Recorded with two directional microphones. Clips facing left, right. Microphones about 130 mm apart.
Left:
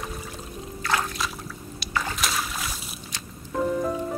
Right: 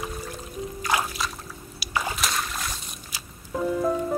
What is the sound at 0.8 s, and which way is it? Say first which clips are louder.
Trickle: even; 10° right (ahead or behind).